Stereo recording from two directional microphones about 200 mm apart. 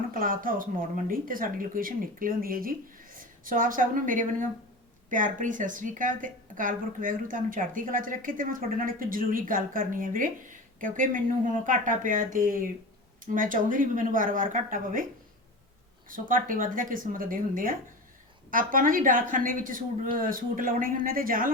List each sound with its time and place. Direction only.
0.1 s a woman's voice: 45° right (ahead or behind)
16.0 s speech: 45° right (ahead or behind)